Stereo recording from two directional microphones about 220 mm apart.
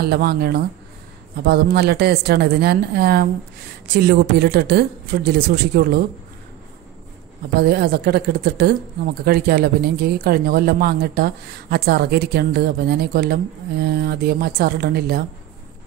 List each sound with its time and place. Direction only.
0.0 s speech: 45° right (ahead or behind)
7.6 s speech: 45° right (ahead or behind)